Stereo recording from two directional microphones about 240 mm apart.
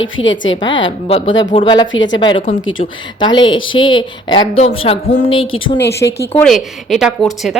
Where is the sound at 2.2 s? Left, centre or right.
Centre.